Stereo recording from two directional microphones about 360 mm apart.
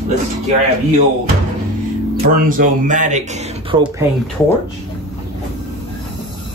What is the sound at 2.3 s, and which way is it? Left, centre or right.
Speech, right.